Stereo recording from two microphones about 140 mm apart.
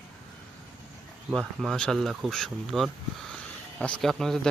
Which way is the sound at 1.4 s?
Centre (ahead or behind).